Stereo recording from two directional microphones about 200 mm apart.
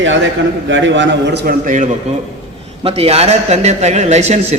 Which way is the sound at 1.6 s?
40° right (ahead or behind).